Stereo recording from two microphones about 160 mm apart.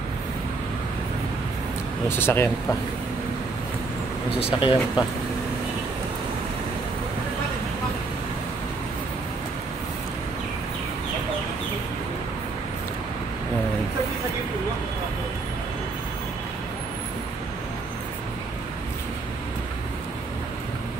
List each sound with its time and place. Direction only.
2.0 s speech: 15° left (ahead or behind)
4.4 s speech: 35° left (ahead or behind)